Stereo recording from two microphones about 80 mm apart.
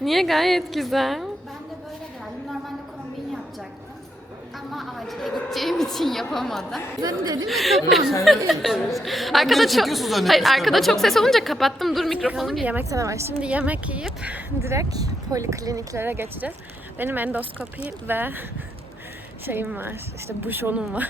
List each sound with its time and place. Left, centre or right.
0.0 s a woman's voice: centre
4.7 s a sound: centre
6.3 s a woman's voice: centre
7.0 s speech: right
7.4 s a woman's voice: centre
12.8 s a woman's voice: right
13.4 s a woman's voice: centre
14.6 s a woman's voice: right
14.9 s speech: right
16.0 s speech: right
19.7 s a woman's voice: right